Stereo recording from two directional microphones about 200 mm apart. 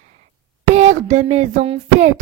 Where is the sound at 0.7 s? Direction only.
35° right (ahead or behind).